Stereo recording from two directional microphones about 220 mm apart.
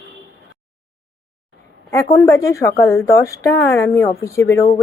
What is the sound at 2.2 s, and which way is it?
Speech, 15° left (ahead or behind).